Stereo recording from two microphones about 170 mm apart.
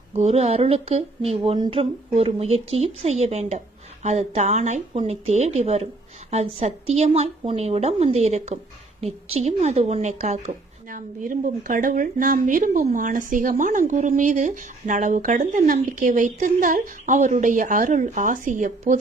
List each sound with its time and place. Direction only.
0.1 s speech: 40° right (ahead or behind)